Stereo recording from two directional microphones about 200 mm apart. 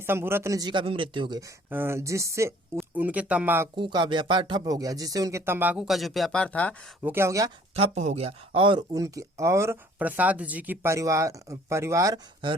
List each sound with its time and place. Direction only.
0.0 s speech: 10° right (ahead or behind)
1.7 s speech: 10° right (ahead or behind)
3.8 s speech: 25° right (ahead or behind); by 6.7 s 5° left (ahead or behind)
7.0 s speech: 10° right (ahead or behind)
7.8 s speech: 35° right (ahead or behind)